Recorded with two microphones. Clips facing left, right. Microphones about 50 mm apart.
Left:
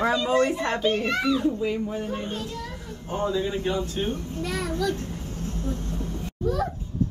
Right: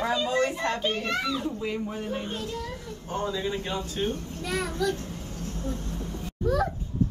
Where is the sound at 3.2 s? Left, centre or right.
Centre.